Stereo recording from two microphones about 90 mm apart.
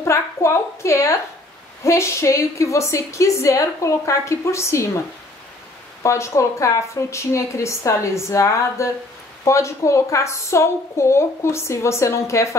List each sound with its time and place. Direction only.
0.0 s a woman's voice: 30° left (ahead or behind)
6.0 s a woman's voice: 30° left (ahead or behind)